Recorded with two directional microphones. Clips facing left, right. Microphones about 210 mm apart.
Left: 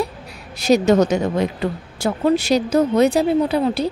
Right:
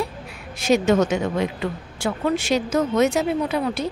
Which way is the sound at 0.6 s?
40° left (ahead or behind).